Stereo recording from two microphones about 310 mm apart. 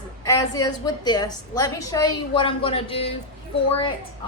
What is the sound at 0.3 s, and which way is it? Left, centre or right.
A woman's voice, centre.